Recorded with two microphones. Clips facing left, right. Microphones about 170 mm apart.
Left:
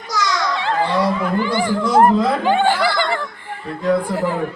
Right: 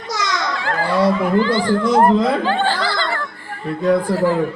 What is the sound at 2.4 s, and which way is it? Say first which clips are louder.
Laughter: left 3 dB; 15° left (ahead or behind).